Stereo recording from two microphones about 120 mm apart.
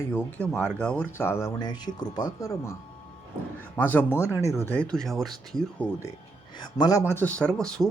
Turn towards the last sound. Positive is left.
turn(degrees=5)  # may be behind; listen again after turning